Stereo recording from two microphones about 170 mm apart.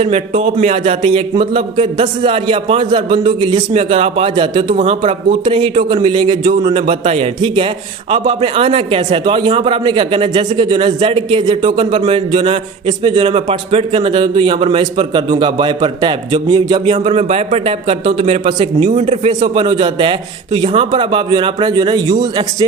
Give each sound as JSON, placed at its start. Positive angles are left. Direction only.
{"t": 0.0, "sound": "a man's voice", "side_deg": -35}
{"t": 16.9, "sound": "a man's voice", "side_deg": -40}